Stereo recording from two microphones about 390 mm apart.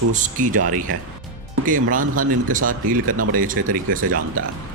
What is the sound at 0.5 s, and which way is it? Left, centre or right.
Speech, right.